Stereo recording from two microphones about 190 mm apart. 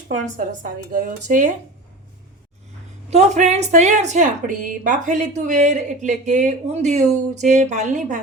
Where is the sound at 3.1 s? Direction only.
35° right (ahead or behind).